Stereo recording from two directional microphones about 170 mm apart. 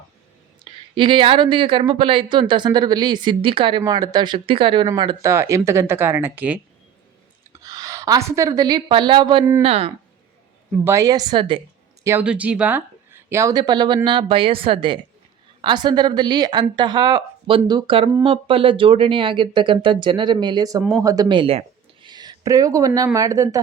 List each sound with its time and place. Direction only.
0.6 s speech: 30° right (ahead or behind); by 6.6 s 10° right (ahead or behind)
7.5 s a woman's voice: 20° right (ahead or behind)
10.8 s speech: 20° right (ahead or behind)
12.0 s speech: 10° right (ahead or behind); by 21.6 s 30° right (ahead or behind)
22.0 s a sound: 25° right (ahead or behind)
23.1 s speech: 20° right (ahead or behind)